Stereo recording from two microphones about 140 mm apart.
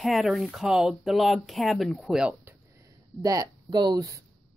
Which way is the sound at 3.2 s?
25° right (ahead or behind).